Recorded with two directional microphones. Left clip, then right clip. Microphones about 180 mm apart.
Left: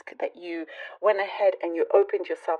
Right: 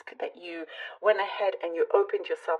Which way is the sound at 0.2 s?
40° left (ahead or behind).